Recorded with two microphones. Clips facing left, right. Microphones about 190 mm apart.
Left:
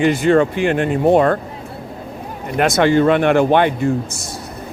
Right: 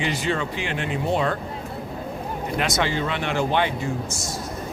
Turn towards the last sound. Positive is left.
turn(degrees=55)  # may be behind; listen again after turning